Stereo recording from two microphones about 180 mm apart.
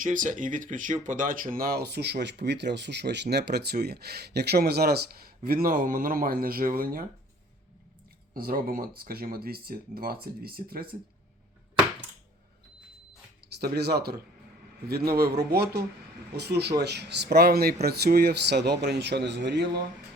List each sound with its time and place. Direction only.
0.0 s speech: 45° right (ahead or behind)
8.3 s speech: 55° right (ahead or behind)
13.6 s speech: 65° right (ahead or behind)
15.5 s speech: 60° right (ahead or behind)